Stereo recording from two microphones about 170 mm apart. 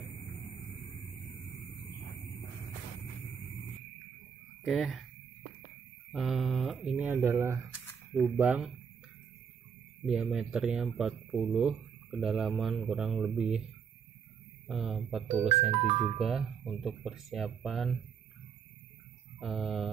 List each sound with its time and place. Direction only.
4.6 s speech: centre (ahead or behind)
6.1 s speech: centre (ahead or behind)
10.0 s speech: 5° right (ahead or behind)
14.7 s speech: centre (ahead or behind)
15.3 s speech: 35° right (ahead or behind)
16.2 s speech: centre (ahead or behind)
19.4 s speech: centre (ahead or behind)